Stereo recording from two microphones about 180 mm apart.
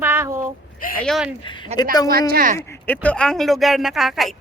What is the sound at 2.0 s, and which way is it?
Speech, 60° right (ahead or behind).